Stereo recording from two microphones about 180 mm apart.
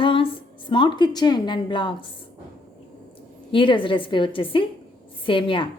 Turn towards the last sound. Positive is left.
turn(degrees=30)  # may be behind; listen again after turning